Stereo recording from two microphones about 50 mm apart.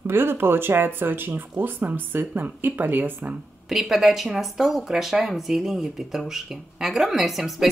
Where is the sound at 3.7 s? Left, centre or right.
Centre.